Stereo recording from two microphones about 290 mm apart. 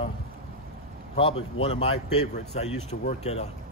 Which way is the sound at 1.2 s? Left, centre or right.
Centre.